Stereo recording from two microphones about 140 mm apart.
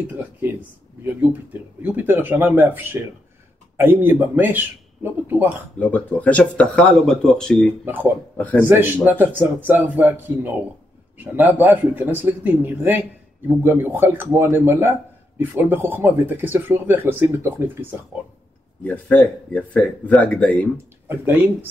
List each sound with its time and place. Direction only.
1.0 s speech: 15° right (ahead or behind)
5.8 s speech: 10° left (ahead or behind)
7.8 s speech: 15° right (ahead or behind)
8.4 s speech: 10° left (ahead or behind)
8.6 s speech: 15° right (ahead or behind)
18.9 s speech: 10° left (ahead or behind)
21.1 s speech: 15° right (ahead or behind)